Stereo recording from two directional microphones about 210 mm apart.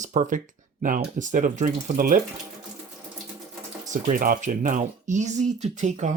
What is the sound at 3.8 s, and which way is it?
Speech, 40° right (ahead or behind).